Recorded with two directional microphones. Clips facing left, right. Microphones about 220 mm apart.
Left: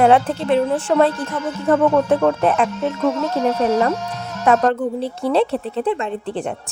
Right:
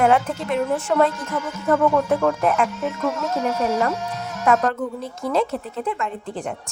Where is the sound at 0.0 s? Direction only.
30° left (ahead or behind).